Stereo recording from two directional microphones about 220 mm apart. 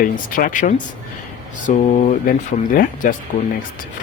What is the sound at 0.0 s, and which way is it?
Speech, 40° left (ahead or behind).